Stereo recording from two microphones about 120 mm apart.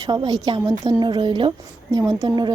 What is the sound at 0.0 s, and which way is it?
A woman's voice, 30° right (ahead or behind).